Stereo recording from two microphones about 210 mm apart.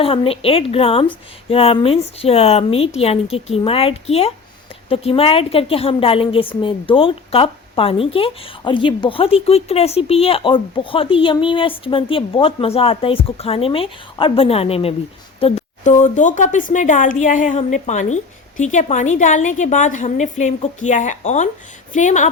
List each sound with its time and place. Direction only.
0.0 s a woman's voice: 25° left (ahead or behind)